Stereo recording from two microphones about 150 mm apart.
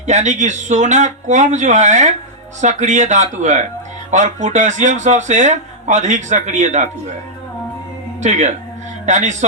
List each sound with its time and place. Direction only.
0.0 s speech: 50° right (ahead or behind)
8.2 s speech: 50° right (ahead or behind)